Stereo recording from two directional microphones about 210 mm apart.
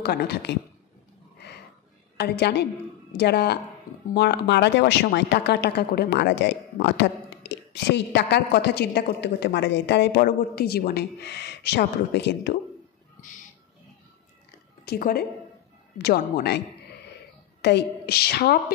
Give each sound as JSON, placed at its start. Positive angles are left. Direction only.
{"t": 0.0, "sound": "speech", "side_deg": 50}
{"t": 2.1, "sound": "speech", "side_deg": 50}
{"t": 14.9, "sound": "speech", "side_deg": 45}